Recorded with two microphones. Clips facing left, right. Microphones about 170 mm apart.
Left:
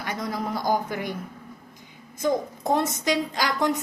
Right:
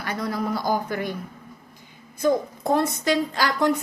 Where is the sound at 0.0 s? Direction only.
20° left (ahead or behind).